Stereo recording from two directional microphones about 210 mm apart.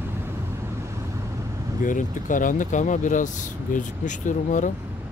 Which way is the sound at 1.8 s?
40° left (ahead or behind).